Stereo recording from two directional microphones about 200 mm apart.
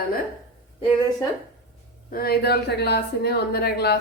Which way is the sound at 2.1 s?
50° left (ahead or behind).